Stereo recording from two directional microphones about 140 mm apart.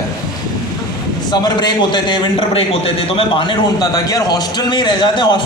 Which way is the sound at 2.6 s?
45° left (ahead or behind).